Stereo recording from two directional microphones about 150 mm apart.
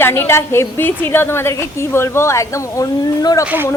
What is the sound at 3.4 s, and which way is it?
Speech, 15° right (ahead or behind).